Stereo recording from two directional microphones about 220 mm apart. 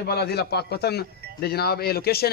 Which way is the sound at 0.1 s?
45° left (ahead or behind).